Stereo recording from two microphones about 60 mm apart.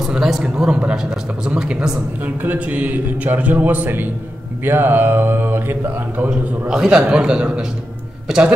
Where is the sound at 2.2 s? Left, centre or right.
Right.